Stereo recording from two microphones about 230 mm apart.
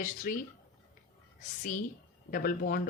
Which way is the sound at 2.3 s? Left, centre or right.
Left.